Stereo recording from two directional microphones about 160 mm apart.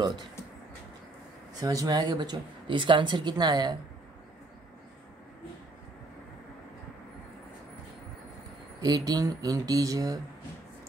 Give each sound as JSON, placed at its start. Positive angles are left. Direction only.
{"t": 1.5, "sound": "speech", "side_deg": -20}
{"t": 8.8, "sound": "speech", "side_deg": -25}